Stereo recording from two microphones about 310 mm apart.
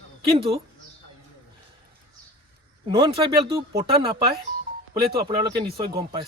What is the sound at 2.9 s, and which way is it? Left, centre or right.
Speech, centre.